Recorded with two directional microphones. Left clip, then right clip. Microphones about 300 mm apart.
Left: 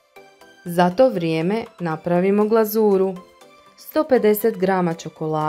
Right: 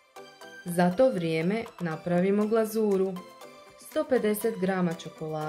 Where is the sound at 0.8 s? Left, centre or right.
Centre.